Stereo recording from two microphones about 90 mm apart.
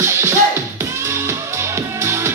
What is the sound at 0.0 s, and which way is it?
Music, 30° right (ahead or behind).